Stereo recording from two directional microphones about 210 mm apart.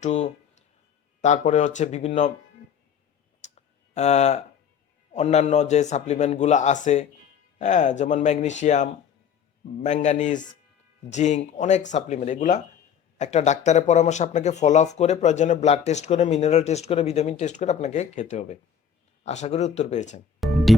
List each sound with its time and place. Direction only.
0.0 s speech: 35° left (ahead or behind)
3.4 s clicking: 30° left (ahead or behind)
5.1 s speech: 30° left (ahead or behind)
20.4 s music: centre (ahead or behind)